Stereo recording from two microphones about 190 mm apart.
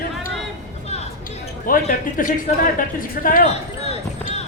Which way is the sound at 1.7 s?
50° left (ahead or behind).